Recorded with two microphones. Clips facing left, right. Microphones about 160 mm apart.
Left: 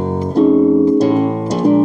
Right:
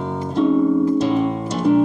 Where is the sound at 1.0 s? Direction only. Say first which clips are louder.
Left 5 dB; 40° left (ahead or behind).